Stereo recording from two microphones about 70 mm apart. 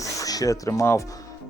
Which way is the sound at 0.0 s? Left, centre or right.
Left.